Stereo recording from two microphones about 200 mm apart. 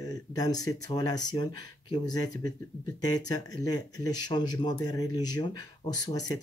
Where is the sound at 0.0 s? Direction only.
20° left (ahead or behind).